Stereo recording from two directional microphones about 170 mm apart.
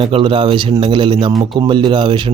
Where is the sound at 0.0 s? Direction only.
30° right (ahead or behind).